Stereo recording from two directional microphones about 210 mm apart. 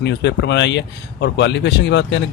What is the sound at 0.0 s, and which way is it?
Speech, 55° left (ahead or behind).